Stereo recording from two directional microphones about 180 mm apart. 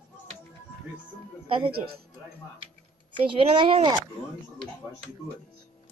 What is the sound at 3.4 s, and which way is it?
Speech, 30° right (ahead or behind).